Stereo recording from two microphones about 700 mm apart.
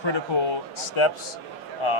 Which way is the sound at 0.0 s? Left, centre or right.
Left.